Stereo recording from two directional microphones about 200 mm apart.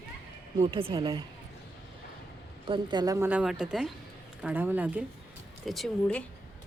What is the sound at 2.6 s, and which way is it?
Speech, 20° right (ahead or behind).